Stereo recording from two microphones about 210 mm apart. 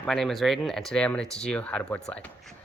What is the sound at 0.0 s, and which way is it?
Speech, centre (ahead or behind).